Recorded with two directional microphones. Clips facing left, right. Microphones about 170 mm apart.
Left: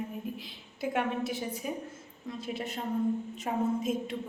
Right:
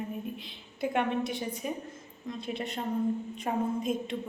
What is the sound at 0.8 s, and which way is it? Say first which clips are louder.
A woman's voice: right 2 dB; 5° left (ahead or behind).